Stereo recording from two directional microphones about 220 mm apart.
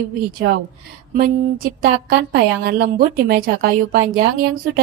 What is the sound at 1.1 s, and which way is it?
A woman's voice, 40° right (ahead or behind).